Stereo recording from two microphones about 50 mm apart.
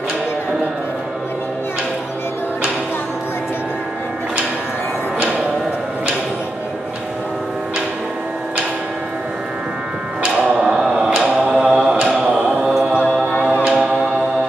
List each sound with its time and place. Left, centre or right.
11.5 s mantra: centre
13.7 s music: centre